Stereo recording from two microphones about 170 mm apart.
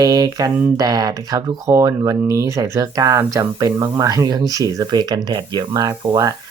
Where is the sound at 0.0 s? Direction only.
20° right (ahead or behind).